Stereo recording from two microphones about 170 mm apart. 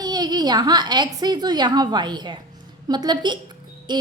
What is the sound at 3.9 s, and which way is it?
Music, 25° right (ahead or behind).